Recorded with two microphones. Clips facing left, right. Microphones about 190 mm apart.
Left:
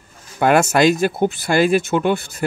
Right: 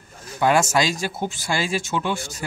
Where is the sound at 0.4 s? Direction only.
60° left (ahead or behind).